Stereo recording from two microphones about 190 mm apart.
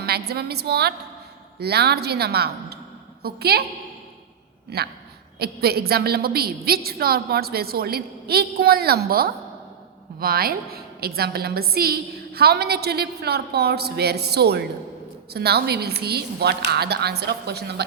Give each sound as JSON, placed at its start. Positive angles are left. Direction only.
{"t": 0.0, "sound": "a woman's voice", "side_deg": -55}
{"t": 4.7, "sound": "a woman's voice", "side_deg": -60}